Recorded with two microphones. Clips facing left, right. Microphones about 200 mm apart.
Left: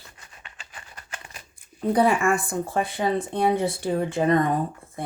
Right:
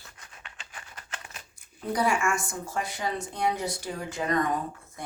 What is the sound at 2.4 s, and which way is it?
Speech, 55° left (ahead or behind).